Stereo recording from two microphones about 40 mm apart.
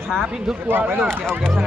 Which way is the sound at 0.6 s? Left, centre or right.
Right.